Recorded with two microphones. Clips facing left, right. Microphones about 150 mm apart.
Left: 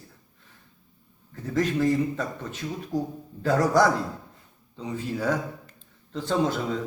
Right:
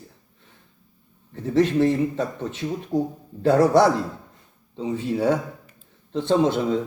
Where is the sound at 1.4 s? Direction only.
25° right (ahead or behind).